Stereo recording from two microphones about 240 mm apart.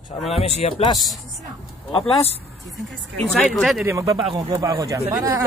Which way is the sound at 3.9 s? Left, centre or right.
Centre.